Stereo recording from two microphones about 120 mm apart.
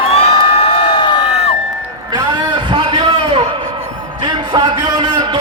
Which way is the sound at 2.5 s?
45° right (ahead or behind).